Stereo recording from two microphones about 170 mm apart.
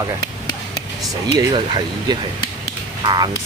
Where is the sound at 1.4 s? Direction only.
25° right (ahead or behind).